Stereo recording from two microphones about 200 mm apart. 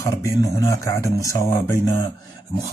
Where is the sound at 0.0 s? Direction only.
15° left (ahead or behind).